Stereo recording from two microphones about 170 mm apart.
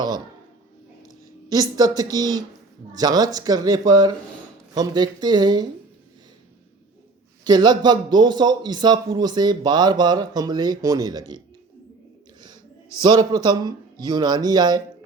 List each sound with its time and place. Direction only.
1.5 s a man's voice: 20° right (ahead or behind)
7.4 s a man's voice: 25° right (ahead or behind)
13.0 s a man's voice: 25° right (ahead or behind)